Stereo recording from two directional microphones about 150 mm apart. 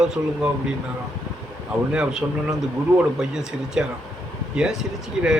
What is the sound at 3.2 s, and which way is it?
A man's voice, 5° right (ahead or behind).